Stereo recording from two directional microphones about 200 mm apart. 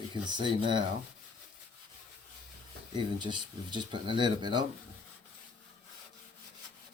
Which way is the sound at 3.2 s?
25° right (ahead or behind).